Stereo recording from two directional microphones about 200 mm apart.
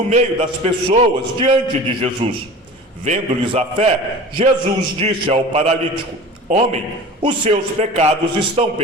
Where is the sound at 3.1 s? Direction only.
30° right (ahead or behind).